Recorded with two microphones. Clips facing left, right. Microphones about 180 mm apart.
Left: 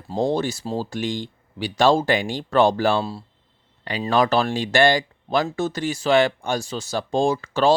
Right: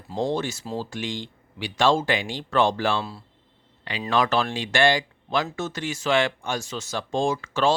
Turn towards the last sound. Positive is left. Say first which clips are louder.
# left 4 dB
turn(degrees=35)  # may be behind; listen again after turning